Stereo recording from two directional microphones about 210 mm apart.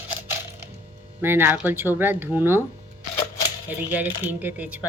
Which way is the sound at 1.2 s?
10° right (ahead or behind).